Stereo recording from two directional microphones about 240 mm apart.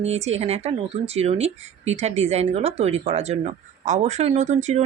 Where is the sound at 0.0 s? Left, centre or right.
Right.